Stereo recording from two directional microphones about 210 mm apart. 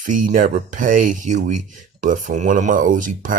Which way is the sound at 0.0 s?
40° right (ahead or behind).